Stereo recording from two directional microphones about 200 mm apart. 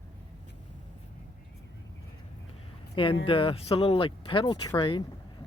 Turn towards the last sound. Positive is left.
turn(degrees=25)  # may be behind; listen again after turning